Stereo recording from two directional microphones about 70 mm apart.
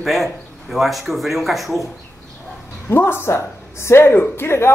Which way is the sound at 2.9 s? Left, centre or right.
Left.